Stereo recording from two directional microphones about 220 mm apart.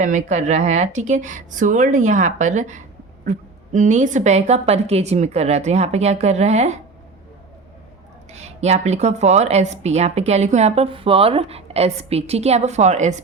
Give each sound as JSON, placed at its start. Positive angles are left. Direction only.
{"t": 0.0, "sound": "a woman's voice", "side_deg": -35}
{"t": 8.3, "sound": "speech", "side_deg": -30}